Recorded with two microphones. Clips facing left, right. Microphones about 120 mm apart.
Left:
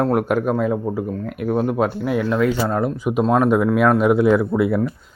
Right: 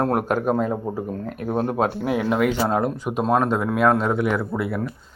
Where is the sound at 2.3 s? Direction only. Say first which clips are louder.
Even; 15° right (ahead or behind).